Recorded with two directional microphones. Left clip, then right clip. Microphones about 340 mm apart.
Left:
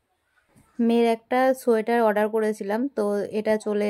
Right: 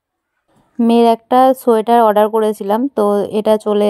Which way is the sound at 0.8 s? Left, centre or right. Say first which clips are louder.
Right 10 dB; centre.